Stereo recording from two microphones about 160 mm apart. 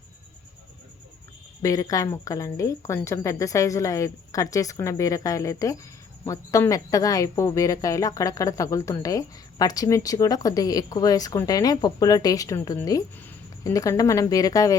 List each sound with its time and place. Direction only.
1.6 s speech: 20° left (ahead or behind)